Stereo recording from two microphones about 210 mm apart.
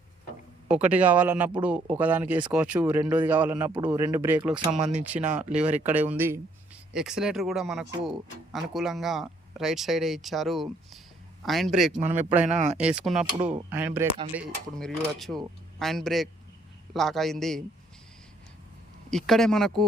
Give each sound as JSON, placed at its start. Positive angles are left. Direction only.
{"t": 0.7, "sound": "speech", "side_deg": -5}
{"t": 12.5, "sound": "speech", "side_deg": -35}
{"t": 12.8, "sound": "speech", "side_deg": -5}
{"t": 14.3, "sound": "speech", "side_deg": 0}
{"t": 19.1, "sound": "speech", "side_deg": 0}